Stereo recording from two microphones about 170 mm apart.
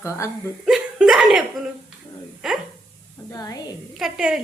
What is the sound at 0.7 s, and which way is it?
Chuckle, centre (ahead or behind).